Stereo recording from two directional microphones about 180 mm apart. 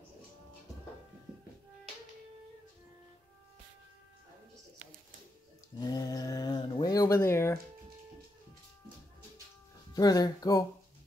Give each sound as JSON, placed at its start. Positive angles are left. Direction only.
{"t": 5.8, "sound": "mantra", "side_deg": 20}
{"t": 9.9, "sound": "speech", "side_deg": 20}